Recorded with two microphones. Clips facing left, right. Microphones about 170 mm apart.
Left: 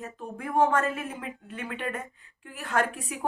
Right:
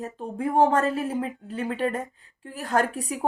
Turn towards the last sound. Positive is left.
turn(degrees=-35)  # may be behind; listen again after turning